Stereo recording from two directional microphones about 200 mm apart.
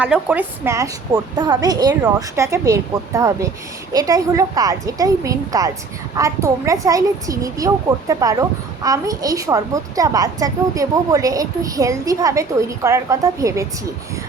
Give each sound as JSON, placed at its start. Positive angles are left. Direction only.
{"t": 0.0, "sound": "speech", "side_deg": -5}